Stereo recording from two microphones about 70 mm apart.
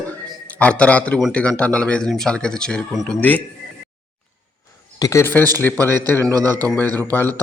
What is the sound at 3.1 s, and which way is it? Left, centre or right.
Speech, left.